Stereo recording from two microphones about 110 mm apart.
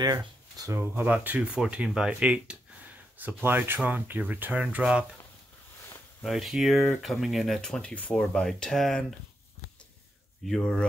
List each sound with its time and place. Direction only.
0.6 s speech: 25° right (ahead or behind)
6.2 s speech: centre (ahead or behind)
10.4 s speech: 5° left (ahead or behind)